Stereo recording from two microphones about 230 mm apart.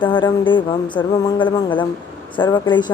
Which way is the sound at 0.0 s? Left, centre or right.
Left.